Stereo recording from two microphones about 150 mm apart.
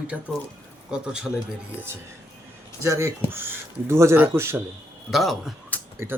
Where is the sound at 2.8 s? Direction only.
20° right (ahead or behind).